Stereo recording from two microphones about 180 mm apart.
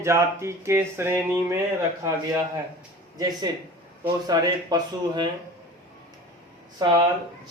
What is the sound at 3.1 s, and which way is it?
A man's voice, 20° right (ahead or behind).